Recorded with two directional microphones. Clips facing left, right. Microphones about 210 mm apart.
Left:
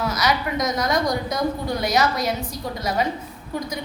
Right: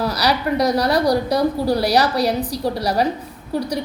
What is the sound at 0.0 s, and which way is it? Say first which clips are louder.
A woman's voice: right 3 dB; 35° right (ahead or behind).